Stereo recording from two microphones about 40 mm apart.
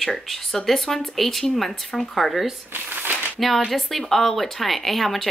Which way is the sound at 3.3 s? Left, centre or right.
Centre.